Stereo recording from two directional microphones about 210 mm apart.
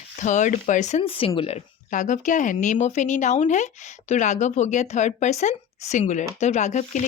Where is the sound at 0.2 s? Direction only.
35° left (ahead or behind).